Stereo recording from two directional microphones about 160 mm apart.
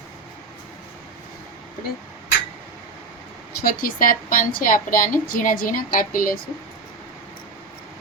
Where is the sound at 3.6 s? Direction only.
60° left (ahead or behind).